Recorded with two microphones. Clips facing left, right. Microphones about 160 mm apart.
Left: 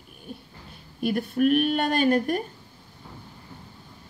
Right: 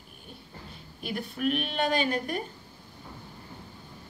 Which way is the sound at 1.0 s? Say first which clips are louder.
Left 9 dB; 50° left (ahead or behind).